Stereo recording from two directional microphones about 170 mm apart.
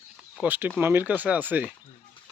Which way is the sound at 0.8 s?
10° right (ahead or behind).